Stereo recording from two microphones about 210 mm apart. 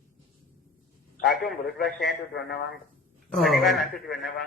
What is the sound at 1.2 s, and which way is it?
Speech, centre (ahead or behind).